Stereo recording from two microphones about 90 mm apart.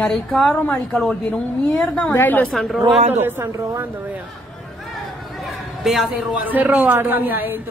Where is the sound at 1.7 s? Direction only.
5° left (ahead or behind).